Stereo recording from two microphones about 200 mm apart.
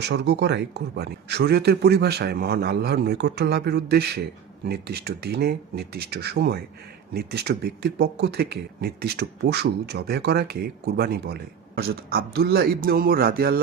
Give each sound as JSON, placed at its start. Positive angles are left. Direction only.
{"t": 0.0, "sound": "speech", "side_deg": -60}